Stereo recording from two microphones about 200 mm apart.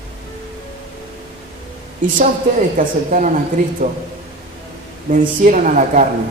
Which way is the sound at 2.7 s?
40° right (ahead or behind).